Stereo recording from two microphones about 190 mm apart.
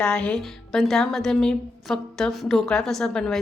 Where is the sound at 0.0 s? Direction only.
5° left (ahead or behind).